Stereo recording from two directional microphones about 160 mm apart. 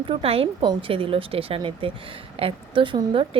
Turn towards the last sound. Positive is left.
turn(degrees=-35)  # may be behind; listen again after turning